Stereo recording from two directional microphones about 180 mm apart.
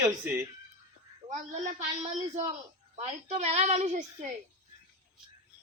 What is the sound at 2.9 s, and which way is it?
A woman's voice, 40° right (ahead or behind).